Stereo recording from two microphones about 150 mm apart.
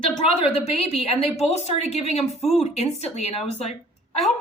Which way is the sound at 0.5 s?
40° left (ahead or behind).